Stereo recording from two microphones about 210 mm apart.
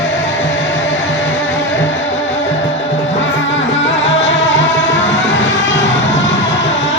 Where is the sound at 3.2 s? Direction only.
65° left (ahead or behind).